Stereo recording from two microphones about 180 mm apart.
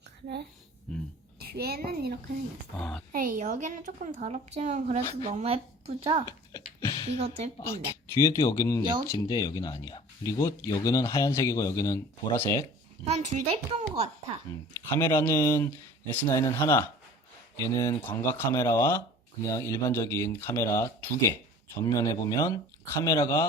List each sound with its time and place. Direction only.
0.9 s speech: 5° left (ahead or behind)
1.4 s a woman's voice: 60° right (ahead or behind)
2.7 s speech: 5° left (ahead or behind)
3.1 s a woman's voice: 50° right (ahead or behind); by 6.2 s 30° right (ahead or behind)
6.2 s a sound: 20° left (ahead or behind)
7.2 s a child's voice: 35° right (ahead or behind)
7.6 s speech: 15° left (ahead or behind)
8.8 s speech: 25° right (ahead or behind)
9.0 s speech: 20° left (ahead or behind)
13.1 s a child's voice: 35° right (ahead or behind)
14.8 s speech: 15° left (ahead or behind)